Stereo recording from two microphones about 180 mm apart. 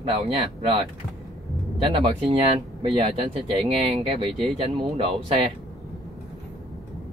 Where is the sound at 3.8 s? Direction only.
35° right (ahead or behind).